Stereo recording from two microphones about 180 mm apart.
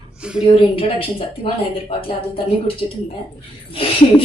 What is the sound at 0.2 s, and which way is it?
Speech, 5° right (ahead or behind).